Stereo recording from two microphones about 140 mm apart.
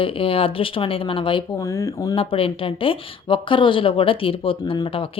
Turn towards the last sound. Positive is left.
turn(degrees=40)  # may be behind; listen again after turning